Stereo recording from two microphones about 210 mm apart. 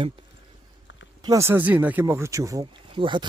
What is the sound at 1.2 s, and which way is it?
Speech, 15° right (ahead or behind).